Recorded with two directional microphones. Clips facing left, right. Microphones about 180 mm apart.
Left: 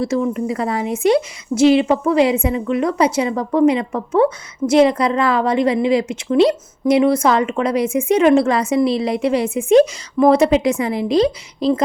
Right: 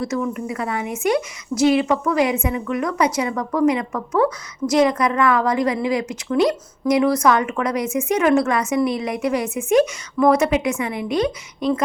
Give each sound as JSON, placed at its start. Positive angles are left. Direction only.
{"t": 0.0, "sound": "a woman's voice", "side_deg": 30}